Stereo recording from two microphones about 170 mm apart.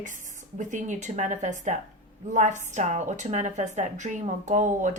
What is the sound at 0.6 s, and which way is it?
A woman's voice, 45° right (ahead or behind).